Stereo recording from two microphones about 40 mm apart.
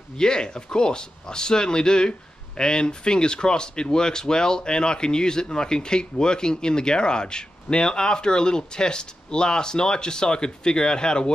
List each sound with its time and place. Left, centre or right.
0.2 s speech: centre